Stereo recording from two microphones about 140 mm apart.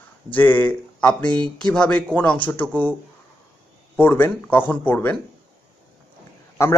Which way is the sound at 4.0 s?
15° left (ahead or behind).